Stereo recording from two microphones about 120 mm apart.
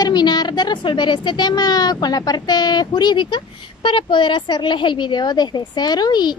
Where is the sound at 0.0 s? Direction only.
35° left (ahead or behind).